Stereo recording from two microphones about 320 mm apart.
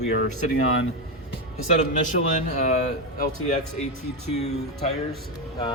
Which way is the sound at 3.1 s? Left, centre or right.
Left.